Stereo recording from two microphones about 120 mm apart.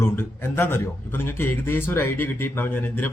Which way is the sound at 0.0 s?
20° left (ahead or behind).